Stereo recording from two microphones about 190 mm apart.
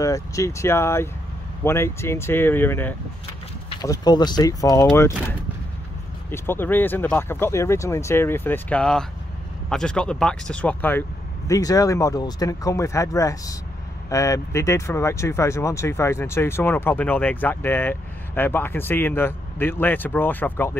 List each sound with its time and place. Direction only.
0.0 s speech: 15° left (ahead or behind)
6.3 s speech: 10° left (ahead or behind)